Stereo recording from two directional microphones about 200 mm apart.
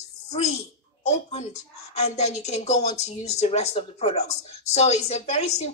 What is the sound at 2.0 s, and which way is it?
Speech, 35° left (ahead or behind).